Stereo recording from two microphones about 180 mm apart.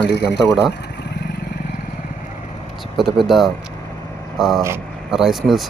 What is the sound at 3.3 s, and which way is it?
Speech, centre (ahead or behind).